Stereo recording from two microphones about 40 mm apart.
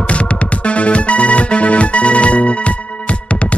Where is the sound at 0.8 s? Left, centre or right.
Left.